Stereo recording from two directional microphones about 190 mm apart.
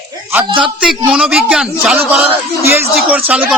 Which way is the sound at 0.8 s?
5° right (ahead or behind).